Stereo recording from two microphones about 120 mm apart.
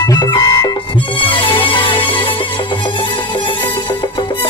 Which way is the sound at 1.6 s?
45° left (ahead or behind).